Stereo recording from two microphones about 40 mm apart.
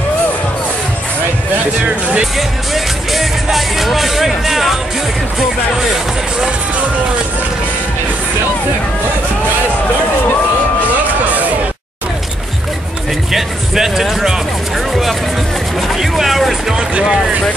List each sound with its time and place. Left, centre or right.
1.9 s speech: right
2.3 s music: centre
13.3 s speech: centre
16.0 s speech: centre